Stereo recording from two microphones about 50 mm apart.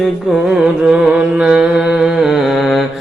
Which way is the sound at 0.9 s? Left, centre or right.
Right.